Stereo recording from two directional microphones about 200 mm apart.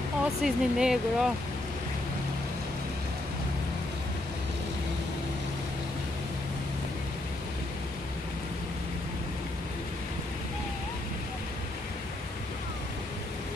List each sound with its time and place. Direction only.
0.2 s speech: 5° right (ahead or behind)